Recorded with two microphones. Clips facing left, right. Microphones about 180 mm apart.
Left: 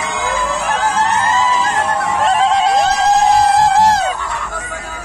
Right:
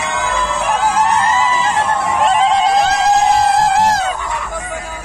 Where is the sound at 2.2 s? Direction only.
Centre (ahead or behind).